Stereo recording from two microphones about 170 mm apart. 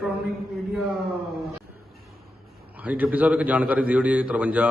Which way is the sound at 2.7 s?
10° right (ahead or behind).